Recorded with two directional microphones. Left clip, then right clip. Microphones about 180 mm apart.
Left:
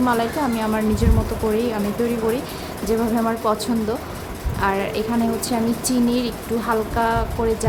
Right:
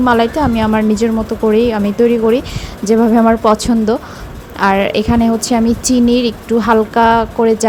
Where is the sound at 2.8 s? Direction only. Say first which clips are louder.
Right 10 dB; 40° right (ahead or behind).